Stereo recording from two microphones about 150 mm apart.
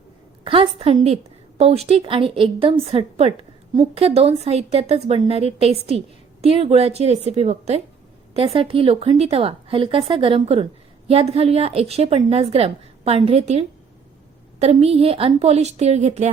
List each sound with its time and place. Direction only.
0.4 s a woman's voice: 35° right (ahead or behind)